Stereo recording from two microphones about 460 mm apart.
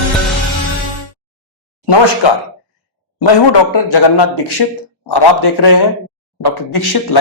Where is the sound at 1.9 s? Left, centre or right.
Left.